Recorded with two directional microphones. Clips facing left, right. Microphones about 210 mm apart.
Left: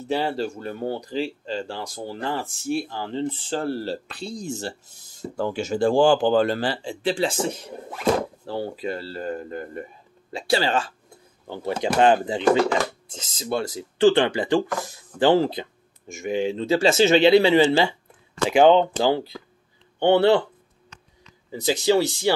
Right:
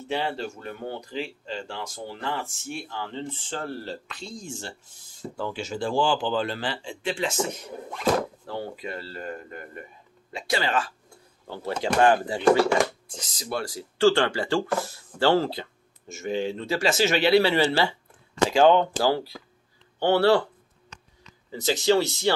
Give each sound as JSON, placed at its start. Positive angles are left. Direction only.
{"t": 0.1, "sound": "speech", "side_deg": 40}
{"t": 21.8, "sound": "speech", "side_deg": 15}